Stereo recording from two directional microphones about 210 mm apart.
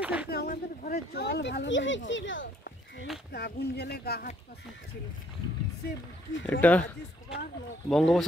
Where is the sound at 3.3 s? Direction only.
50° left (ahead or behind).